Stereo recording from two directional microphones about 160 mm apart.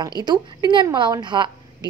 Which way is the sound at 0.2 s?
25° right (ahead or behind).